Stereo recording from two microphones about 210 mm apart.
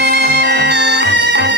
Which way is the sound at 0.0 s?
55° right (ahead or behind).